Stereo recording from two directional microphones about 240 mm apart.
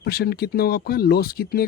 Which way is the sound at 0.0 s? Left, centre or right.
Left.